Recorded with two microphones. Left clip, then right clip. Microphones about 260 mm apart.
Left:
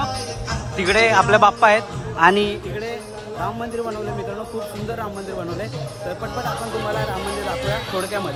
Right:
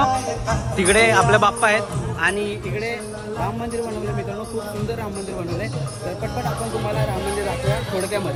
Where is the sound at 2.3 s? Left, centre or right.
Left.